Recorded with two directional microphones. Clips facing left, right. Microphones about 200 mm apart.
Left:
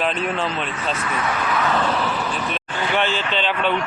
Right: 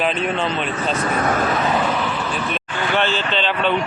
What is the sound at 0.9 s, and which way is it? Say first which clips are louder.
Speech: right 5 dB; 40° right (ahead or behind).